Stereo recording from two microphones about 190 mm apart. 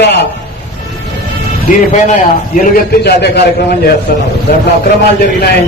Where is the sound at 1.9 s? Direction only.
40° left (ahead or behind).